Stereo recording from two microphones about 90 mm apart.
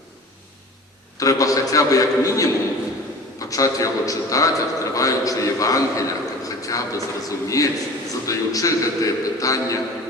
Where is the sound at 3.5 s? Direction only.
40° left (ahead or behind).